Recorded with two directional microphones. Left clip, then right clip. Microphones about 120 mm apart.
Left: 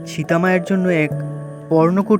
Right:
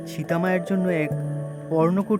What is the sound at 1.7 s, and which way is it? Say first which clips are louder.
Speech: left 7 dB; 45° left (ahead or behind).